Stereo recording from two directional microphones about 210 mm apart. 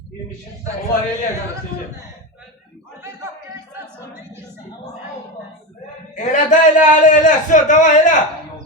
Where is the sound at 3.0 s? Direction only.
15° right (ahead or behind).